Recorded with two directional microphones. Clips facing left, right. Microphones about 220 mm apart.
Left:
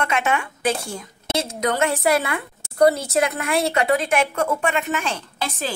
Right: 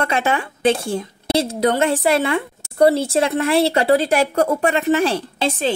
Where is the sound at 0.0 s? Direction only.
30° right (ahead or behind).